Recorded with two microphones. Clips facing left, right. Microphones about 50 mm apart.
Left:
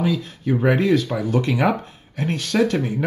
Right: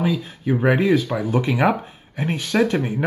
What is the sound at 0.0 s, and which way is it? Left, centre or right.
Speech, centre.